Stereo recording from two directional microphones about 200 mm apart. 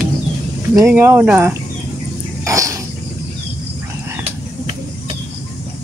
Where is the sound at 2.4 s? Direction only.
15° right (ahead or behind).